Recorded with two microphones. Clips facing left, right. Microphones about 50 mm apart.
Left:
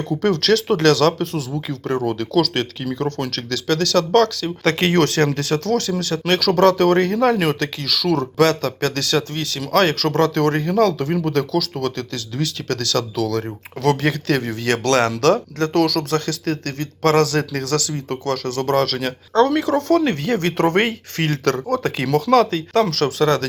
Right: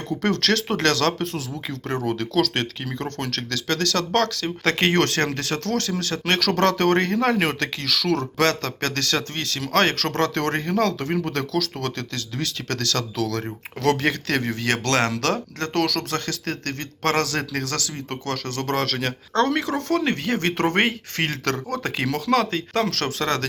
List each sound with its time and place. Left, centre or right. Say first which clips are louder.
0.2 s a man's voice: left 5 dB; right
7.2 s a man's voice: left 4 dB; right